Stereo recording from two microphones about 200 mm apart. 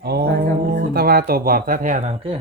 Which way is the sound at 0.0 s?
50° right (ahead or behind).